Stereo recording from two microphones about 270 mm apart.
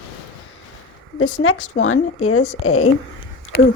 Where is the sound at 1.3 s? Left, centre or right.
Left.